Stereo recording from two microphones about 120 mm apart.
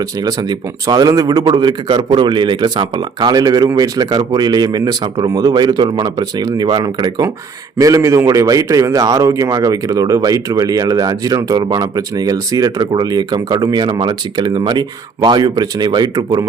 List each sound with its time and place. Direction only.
0.2 s a man's voice: 35° right (ahead or behind)